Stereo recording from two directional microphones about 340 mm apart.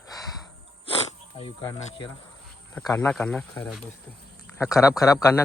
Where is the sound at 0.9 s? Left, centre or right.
Centre.